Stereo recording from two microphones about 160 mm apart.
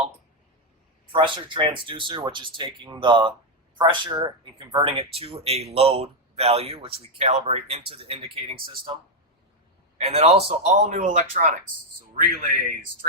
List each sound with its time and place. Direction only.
1.1 s speech: 30° right (ahead or behind)
10.0 s a man's voice: 40° right (ahead or behind)